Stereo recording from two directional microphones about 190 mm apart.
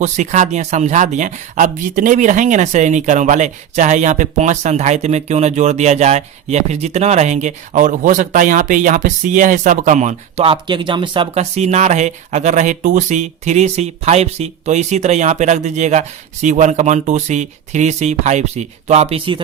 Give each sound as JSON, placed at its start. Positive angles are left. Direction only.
{"t": 0.0, "sound": "speech", "side_deg": -40}